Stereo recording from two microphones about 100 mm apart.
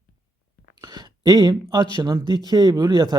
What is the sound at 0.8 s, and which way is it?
Speech, 40° right (ahead or behind).